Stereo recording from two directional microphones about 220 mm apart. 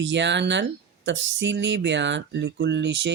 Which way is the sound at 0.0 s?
55° right (ahead or behind).